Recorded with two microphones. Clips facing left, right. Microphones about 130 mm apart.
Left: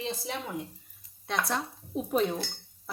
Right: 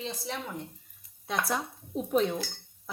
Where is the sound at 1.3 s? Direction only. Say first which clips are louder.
Even; 5° right (ahead or behind).